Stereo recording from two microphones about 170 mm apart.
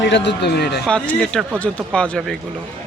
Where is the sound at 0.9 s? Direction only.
5° left (ahead or behind).